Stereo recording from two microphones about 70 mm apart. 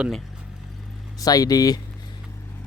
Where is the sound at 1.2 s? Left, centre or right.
Left.